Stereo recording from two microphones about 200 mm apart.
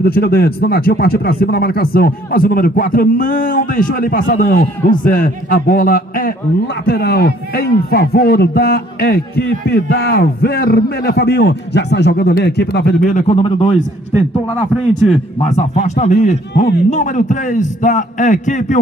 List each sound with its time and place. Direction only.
0.0 s a man's voice: 50° left (ahead or behind)
13.0 s a man's voice: 35° left (ahead or behind)
15.3 s a man's voice: 35° left (ahead or behind)